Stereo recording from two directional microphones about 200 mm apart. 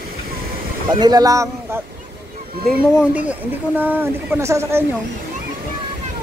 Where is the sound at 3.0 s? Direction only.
5° right (ahead or behind).